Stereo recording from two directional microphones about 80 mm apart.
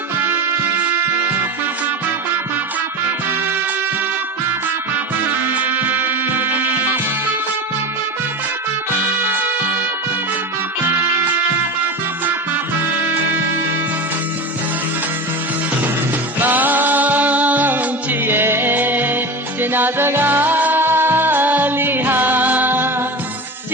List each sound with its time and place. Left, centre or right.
0.2 s music: right
5.5 s music: right
16.4 s music: right